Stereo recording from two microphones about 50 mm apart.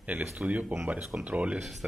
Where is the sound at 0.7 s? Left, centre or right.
Right.